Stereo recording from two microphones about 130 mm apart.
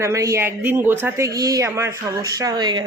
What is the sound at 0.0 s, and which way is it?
A man's voice, 25° right (ahead or behind).